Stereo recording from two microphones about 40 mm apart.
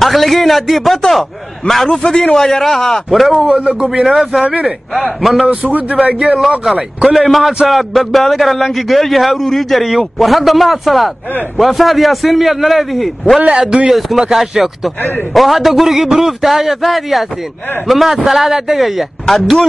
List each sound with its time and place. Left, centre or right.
0.0 s a man's voice: centre
2.0 s a man's voice: left
2.3 s a man's voice: centre
3.1 s a man's voice: centre
3.5 s a man's voice: right
4.0 s a man's voice: centre
5.6 s speech: right
6.1 s a man's voice: centre
6.6 s a man's voice: centre